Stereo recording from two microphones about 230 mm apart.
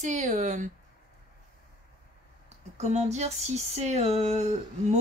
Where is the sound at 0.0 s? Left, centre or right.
Right.